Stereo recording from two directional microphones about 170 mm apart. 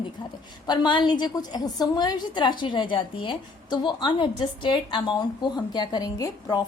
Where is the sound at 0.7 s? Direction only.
25° left (ahead or behind).